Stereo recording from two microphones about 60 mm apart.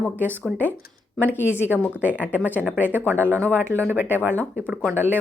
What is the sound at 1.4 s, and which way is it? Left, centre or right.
Speech, right.